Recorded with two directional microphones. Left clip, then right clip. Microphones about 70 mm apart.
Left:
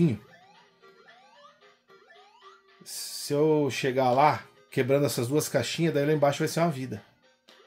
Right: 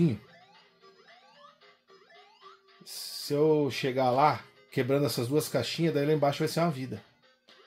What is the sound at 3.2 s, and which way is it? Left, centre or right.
Speech, left.